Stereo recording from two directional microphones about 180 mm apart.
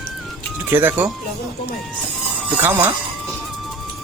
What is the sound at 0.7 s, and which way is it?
Speech, 10° right (ahead or behind).